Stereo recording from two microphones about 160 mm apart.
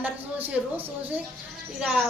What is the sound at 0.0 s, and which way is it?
A woman's voice, 10° right (ahead or behind).